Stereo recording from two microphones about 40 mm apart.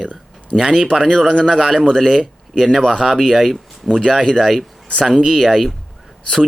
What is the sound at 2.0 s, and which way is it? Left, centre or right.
Speech, centre.